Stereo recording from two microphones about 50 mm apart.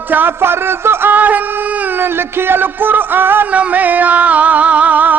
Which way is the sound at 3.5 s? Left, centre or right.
Right.